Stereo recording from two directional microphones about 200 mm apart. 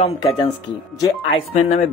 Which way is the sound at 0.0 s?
25° left (ahead or behind).